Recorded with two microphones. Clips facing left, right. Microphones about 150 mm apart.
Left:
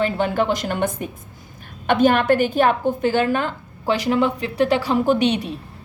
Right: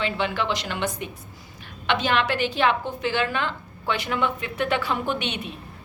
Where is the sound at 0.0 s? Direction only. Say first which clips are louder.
Left 6 dB; 45° left (ahead or behind).